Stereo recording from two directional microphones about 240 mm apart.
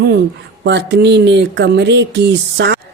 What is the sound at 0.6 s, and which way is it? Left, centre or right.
A woman's voice, right.